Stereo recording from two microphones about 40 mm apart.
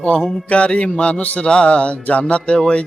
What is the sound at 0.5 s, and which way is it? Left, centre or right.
Mantra, left.